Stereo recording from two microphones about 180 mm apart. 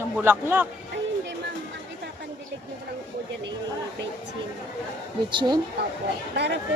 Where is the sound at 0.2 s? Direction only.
10° right (ahead or behind).